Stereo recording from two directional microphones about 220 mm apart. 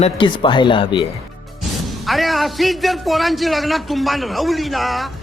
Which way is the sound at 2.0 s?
Centre (ahead or behind).